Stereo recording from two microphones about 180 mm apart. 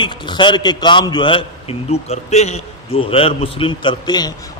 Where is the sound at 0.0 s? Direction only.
25° left (ahead or behind).